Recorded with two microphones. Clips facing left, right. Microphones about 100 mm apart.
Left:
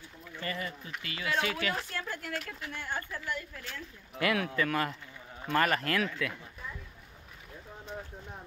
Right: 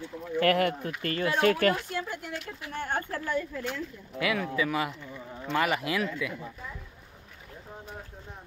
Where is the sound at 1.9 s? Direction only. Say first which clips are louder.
Right 4 dB; 20° right (ahead or behind).